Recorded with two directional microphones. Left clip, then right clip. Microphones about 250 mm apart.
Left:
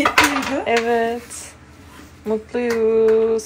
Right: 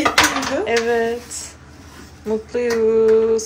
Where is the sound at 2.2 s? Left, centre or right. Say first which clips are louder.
Right 1 dB; centre.